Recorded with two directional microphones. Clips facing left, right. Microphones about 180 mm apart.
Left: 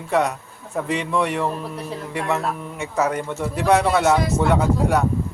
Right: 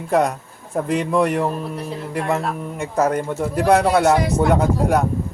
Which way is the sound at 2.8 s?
50° right (ahead or behind).